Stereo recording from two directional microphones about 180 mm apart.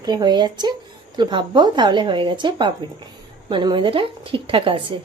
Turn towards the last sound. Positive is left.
turn(degrees=-30)  # may be behind; listen again after turning